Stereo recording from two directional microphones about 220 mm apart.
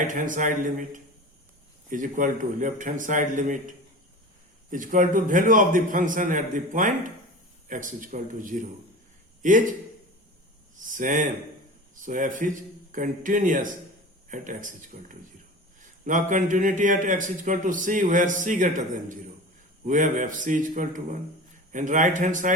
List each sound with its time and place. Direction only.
0.1 s a man's voice: 35° right (ahead or behind)
4.7 s a man's voice: 35° right (ahead or behind)
10.8 s a man's voice: 35° right (ahead or behind)
16.0 s a man's voice: 35° right (ahead or behind)